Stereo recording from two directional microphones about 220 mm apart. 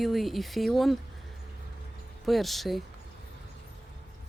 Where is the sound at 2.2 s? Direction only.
Centre (ahead or behind).